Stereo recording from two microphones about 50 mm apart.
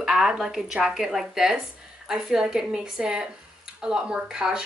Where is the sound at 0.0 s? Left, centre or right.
Centre.